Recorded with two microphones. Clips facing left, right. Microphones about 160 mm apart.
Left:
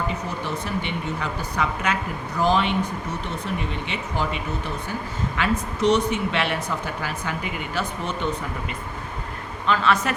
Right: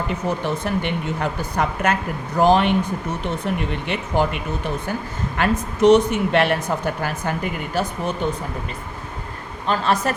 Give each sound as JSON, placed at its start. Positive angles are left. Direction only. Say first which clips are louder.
{"t": 0.6, "sound": "speech", "louder": "right 4 dB", "side_deg": -55}
{"t": 5.4, "sound": "speech", "louder": "right 6 dB", "side_deg": -50}
{"t": 9.6, "sound": "a woman's voice", "louder": "right 1 dB", "side_deg": -40}